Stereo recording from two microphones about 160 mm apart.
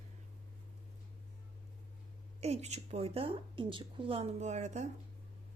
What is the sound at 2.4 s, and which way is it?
Speech, 40° right (ahead or behind).